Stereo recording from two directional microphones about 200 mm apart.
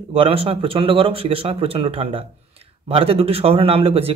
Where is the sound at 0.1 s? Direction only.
30° right (ahead or behind).